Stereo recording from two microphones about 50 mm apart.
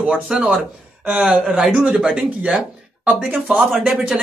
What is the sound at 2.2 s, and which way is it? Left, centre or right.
Speech, right.